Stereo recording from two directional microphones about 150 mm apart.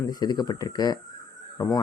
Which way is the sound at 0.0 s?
25° left (ahead or behind).